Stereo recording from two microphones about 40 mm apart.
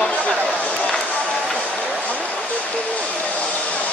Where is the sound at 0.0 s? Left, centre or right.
Left.